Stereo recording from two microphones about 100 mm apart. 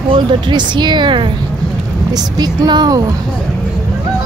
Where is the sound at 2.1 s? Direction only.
40° right (ahead or behind).